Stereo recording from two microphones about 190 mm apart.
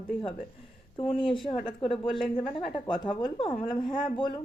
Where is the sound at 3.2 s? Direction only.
25° left (ahead or behind).